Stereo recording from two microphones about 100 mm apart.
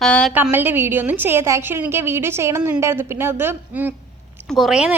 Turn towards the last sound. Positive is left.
turn(degrees=0)  # may be behind; listen again after turning